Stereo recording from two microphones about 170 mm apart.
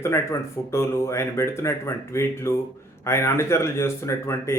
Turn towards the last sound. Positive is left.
turn(degrees=15)  # may be behind; listen again after turning